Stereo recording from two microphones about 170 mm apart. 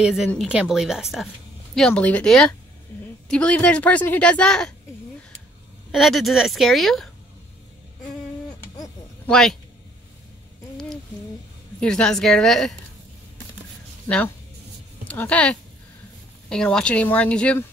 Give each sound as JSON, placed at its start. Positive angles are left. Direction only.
{"t": 0.0, "sound": "a woman's voice", "side_deg": -5}
{"t": 5.9, "sound": "speech", "side_deg": 0}
{"t": 8.7, "sound": "a sound", "side_deg": 20}
{"t": 9.3, "sound": "speech", "side_deg": 5}
{"t": 11.8, "sound": "speech", "side_deg": 5}
{"t": 14.0, "sound": "a woman's voice", "side_deg": 5}